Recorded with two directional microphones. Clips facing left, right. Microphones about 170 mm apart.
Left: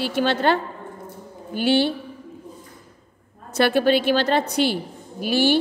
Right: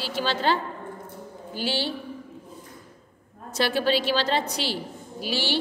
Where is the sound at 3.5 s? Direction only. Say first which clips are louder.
Left 6 dB; 55° left (ahead or behind).